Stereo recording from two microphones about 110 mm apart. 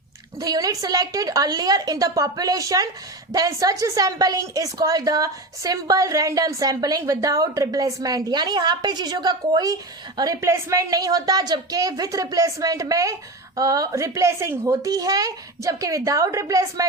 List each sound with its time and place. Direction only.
0.3 s a woman's voice: 35° right (ahead or behind)